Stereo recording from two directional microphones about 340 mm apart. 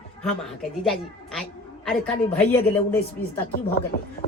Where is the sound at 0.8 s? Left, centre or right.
Centre.